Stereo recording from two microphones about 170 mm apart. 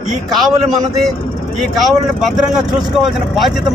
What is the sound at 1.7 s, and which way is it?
Speech, centre (ahead or behind).